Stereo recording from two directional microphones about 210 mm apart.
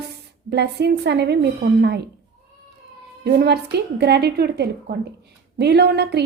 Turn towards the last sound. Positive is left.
turn(degrees=-50)  # may be behind; listen again after turning